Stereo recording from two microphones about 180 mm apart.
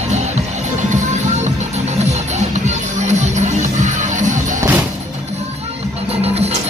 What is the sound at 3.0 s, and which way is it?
Music, 40° right (ahead or behind).